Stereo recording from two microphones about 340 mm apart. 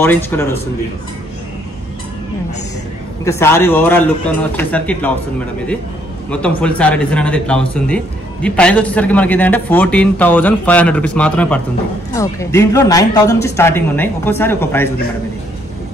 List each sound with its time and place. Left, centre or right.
0.0 s speech: centre
3.3 s speech: centre
6.3 s speech: centre